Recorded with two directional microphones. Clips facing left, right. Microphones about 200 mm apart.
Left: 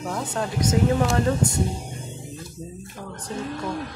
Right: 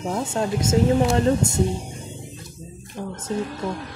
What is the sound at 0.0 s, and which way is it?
Speech, 25° right (ahead or behind).